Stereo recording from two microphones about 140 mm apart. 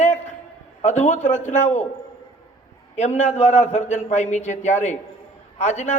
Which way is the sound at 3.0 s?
55° left (ahead or behind).